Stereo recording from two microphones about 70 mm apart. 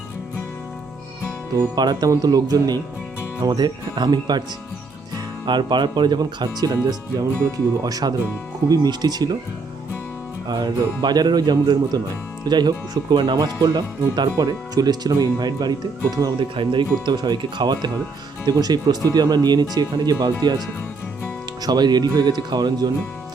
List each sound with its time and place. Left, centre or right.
1.7 s speech: right
2.0 s speech: right
3.4 s speech: right
8.7 s speech: right
10.5 s speech: right
14.3 s speech: right
17.1 s speech: right
18.4 s speech: right
21.6 s speech: right